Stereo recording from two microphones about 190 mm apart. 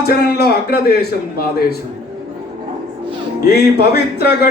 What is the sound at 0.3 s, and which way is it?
Speech, 55° left (ahead or behind).